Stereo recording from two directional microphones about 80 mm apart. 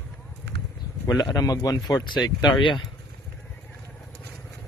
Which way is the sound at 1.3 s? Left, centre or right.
Left.